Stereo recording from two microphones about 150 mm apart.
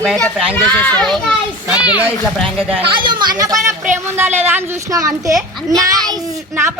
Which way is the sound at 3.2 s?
25° right (ahead or behind).